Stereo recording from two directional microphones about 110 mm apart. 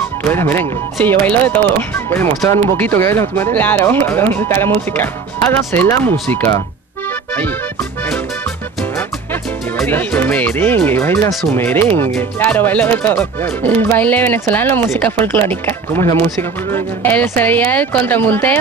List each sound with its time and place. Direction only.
0.3 s speech: 20° left (ahead or behind)
9.8 s speech: 15° left (ahead or behind)